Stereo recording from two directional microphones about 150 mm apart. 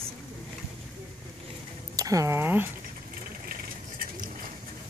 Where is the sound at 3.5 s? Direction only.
70° right (ahead or behind).